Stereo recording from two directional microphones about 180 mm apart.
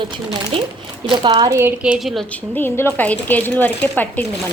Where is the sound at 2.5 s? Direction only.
10° left (ahead or behind).